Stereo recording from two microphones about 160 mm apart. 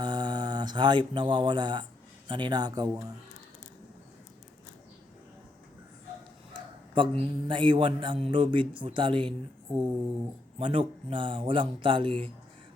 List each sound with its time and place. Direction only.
0.0 s speech: 25° right (ahead or behind)
6.5 s a sound: 30° right (ahead or behind)
7.2 s speech: 30° right (ahead or behind)